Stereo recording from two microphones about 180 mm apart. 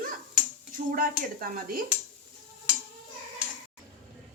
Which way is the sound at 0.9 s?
55° right (ahead or behind).